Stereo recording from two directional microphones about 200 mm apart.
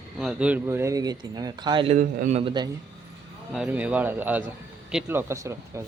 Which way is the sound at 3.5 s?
5° right (ahead or behind).